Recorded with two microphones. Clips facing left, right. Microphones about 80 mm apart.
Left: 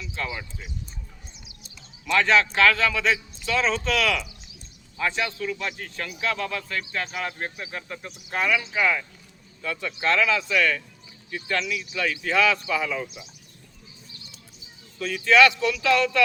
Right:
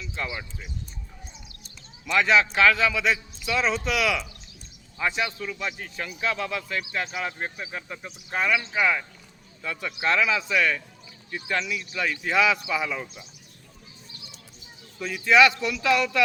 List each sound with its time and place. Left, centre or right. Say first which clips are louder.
2.0 s a man's voice: even; centre
7.1 s a man's voice: even; centre
14.9 s a man's voice: left 1 dB; centre